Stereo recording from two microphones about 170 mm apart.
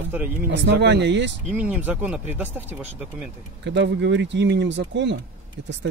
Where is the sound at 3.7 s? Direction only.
90° right.